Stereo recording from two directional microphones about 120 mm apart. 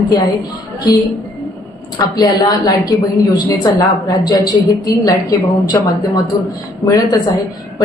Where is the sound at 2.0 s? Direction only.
35° left (ahead or behind).